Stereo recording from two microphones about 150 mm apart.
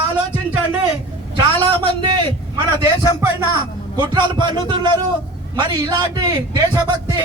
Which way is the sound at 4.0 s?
30° right (ahead or behind).